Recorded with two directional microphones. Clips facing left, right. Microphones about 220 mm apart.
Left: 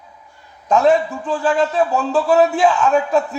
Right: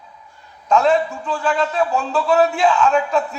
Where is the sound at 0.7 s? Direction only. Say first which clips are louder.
Left 2 dB; 15° left (ahead or behind).